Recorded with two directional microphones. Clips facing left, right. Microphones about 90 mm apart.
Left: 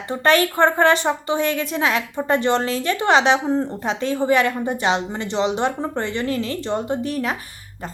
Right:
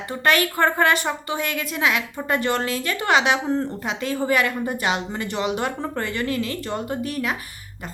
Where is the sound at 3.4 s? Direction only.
15° left (ahead or behind).